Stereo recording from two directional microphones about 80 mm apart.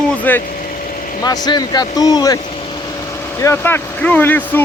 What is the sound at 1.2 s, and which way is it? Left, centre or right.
Speech, left.